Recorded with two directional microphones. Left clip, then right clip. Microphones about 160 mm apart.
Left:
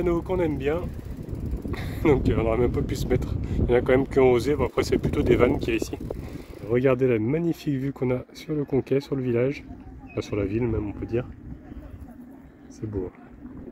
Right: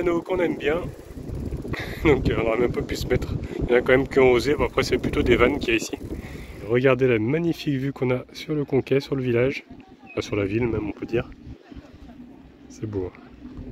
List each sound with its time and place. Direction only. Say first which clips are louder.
0.0 s speech: right 2 dB; 10° left (ahead or behind)
10.4 s speech: right 2 dB; 5° right (ahead or behind)
12.8 s speech: right 2 dB; 5° right (ahead or behind)